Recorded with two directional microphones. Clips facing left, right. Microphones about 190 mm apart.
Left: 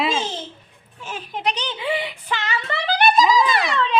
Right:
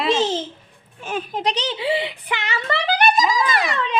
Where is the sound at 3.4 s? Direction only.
5° right (ahead or behind).